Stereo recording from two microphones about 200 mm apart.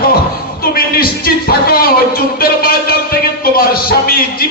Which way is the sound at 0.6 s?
50° left (ahead or behind).